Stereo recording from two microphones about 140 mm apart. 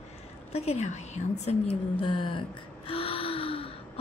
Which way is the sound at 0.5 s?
50° left (ahead or behind).